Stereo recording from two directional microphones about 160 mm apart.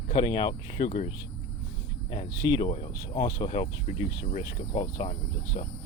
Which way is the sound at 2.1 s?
30° left (ahead or behind).